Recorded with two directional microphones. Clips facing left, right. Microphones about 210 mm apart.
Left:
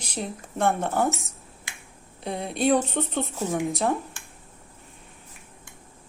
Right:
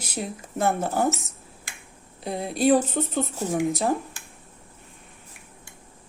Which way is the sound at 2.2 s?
Centre (ahead or behind).